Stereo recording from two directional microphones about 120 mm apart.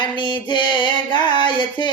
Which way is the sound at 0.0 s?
40° left (ahead or behind).